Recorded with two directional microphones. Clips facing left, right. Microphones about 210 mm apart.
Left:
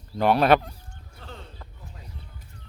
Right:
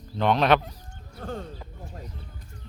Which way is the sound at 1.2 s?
50° right (ahead or behind).